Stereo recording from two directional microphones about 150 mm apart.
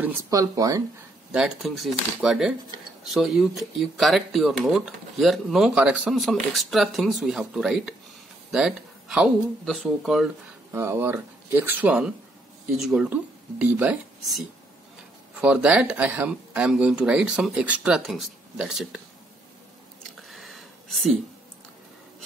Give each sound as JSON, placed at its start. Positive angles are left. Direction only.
{"t": 0.3, "sound": "speech", "side_deg": -25}
{"t": 1.3, "sound": "speech", "side_deg": -5}
{"t": 10.7, "sound": "speech", "side_deg": -15}
{"t": 15.4, "sound": "speech", "side_deg": -5}
{"t": 20.2, "sound": "a sound", "side_deg": 0}